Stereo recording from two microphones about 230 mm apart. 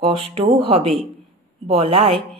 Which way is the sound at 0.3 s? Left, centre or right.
Right.